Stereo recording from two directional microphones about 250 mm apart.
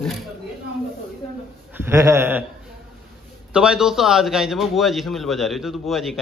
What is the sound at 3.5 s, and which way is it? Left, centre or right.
A man's voice, centre.